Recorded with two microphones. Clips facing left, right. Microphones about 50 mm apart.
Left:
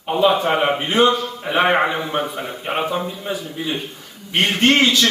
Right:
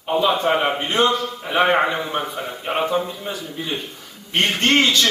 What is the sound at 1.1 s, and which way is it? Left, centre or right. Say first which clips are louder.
Speech: even; centre.